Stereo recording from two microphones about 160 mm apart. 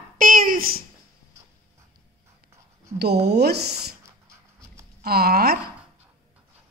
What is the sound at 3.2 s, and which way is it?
Speech, 90° right.